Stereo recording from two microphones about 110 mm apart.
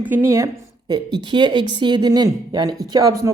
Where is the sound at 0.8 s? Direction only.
40° right (ahead or behind).